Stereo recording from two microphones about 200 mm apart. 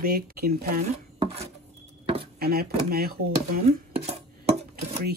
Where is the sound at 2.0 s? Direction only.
30° right (ahead or behind).